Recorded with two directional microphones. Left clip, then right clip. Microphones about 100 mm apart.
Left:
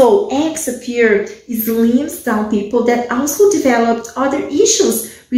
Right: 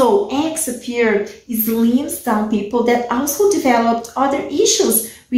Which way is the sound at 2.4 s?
20° right (ahead or behind).